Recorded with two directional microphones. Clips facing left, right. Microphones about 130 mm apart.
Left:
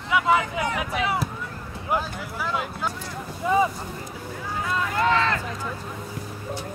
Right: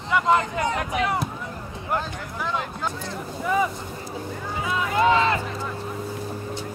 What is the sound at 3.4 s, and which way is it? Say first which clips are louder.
Speech: left 2 dB; 25° left (ahead or behind).